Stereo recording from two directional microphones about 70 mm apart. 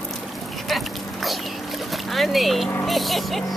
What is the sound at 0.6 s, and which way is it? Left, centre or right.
Duck, centre.